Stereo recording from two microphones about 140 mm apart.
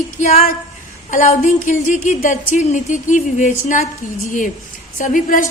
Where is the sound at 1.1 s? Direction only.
60° left (ahead or behind).